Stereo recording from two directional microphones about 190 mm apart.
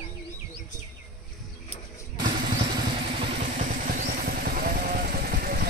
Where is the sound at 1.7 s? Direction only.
35° left (ahead or behind).